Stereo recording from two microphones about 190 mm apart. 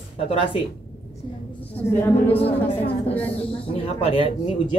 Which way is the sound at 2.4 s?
30° left (ahead or behind).